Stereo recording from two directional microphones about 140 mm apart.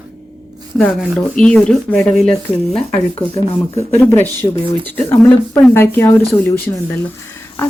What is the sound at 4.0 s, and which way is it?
Speech, 15° left (ahead or behind).